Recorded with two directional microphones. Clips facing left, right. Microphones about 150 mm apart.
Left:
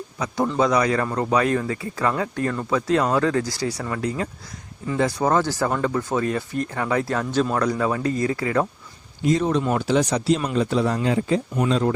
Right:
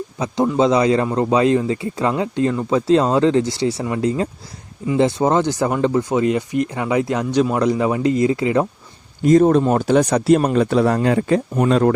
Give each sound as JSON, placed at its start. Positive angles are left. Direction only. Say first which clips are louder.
{"t": 0.4, "sound": "speech", "louder": "right 5 dB", "side_deg": -20}
{"t": 9.2, "sound": "speech", "louder": "right 8 dB", "side_deg": -50}